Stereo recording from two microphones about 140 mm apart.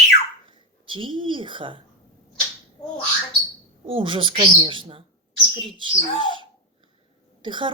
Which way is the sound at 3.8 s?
40° right (ahead or behind).